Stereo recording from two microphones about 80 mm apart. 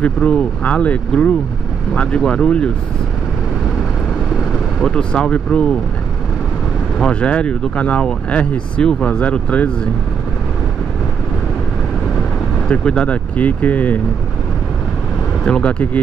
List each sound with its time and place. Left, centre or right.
0.0 s speech: centre
4.8 s speech: centre
7.0 s speech: centre
12.6 s speech: centre
15.4 s speech: centre